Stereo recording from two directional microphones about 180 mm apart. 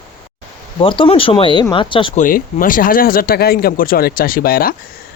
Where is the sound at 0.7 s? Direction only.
30° left (ahead or behind).